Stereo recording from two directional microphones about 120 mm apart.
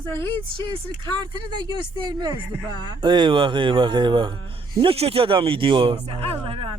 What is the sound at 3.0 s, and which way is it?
Speech, 40° right (ahead or behind).